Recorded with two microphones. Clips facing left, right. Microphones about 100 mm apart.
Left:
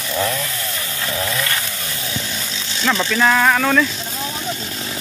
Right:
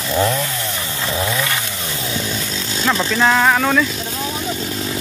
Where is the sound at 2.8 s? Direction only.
10° right (ahead or behind).